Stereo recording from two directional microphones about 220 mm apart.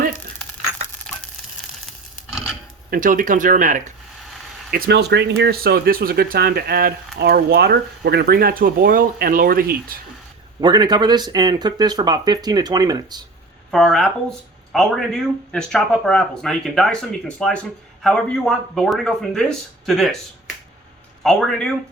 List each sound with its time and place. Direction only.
2.9 s speech: 35° right (ahead or behind)
4.7 s speech: 50° right (ahead or behind)
10.6 s speech: 20° right (ahead or behind)
13.7 s speech: centre (ahead or behind)
21.2 s speech: centre (ahead or behind)